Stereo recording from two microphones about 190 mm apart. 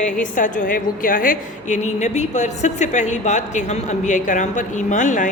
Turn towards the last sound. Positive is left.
turn(degrees=40)  # may be behind; listen again after turning